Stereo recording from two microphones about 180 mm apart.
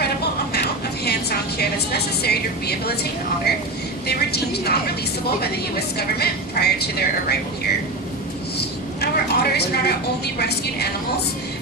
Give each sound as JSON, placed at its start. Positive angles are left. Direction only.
{"t": 1.0, "sound": "a woman's voice", "side_deg": 60}
{"t": 9.0, "sound": "a woman's voice", "side_deg": 65}